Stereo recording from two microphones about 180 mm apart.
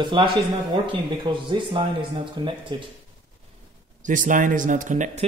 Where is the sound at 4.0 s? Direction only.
45° right (ahead or behind).